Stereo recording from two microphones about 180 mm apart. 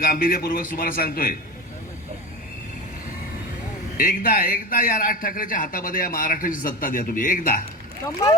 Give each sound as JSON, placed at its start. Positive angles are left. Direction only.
{"t": 0.0, "sound": "a man's voice", "side_deg": 55}
{"t": 3.9, "sound": "a man's voice", "side_deg": 50}